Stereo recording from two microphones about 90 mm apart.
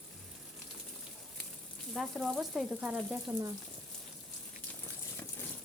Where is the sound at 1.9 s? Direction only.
Centre (ahead or behind).